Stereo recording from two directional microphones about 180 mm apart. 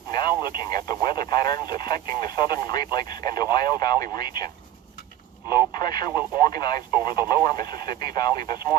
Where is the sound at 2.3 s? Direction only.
20° left (ahead or behind).